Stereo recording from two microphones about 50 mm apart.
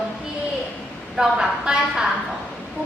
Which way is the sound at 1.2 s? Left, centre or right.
Centre.